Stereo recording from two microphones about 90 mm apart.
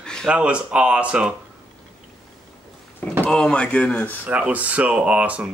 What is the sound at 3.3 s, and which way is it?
Speech, 10° left (ahead or behind).